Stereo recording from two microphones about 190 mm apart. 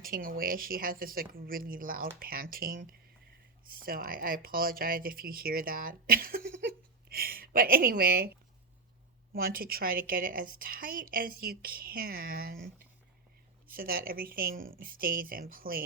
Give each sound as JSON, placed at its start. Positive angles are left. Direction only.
{"t": 0.0, "sound": "a woman's voice", "side_deg": -45}
{"t": 3.8, "sound": "a woman's voice", "side_deg": -50}
{"t": 9.3, "sound": "a woman's voice", "side_deg": -50}
{"t": 13.7, "sound": "a woman's voice", "side_deg": -50}